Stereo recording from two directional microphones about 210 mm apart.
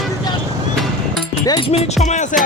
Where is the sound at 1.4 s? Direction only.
20° left (ahead or behind).